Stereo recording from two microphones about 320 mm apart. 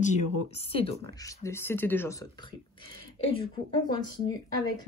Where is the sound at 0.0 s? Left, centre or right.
Left.